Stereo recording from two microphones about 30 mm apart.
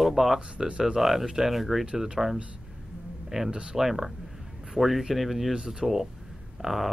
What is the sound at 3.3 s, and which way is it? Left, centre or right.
Speech, right.